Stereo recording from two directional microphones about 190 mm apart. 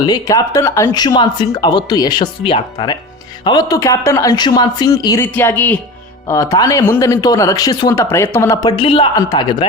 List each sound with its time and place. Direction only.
0.0 s speech: 20° left (ahead or behind)
8.7 s speech: 30° left (ahead or behind)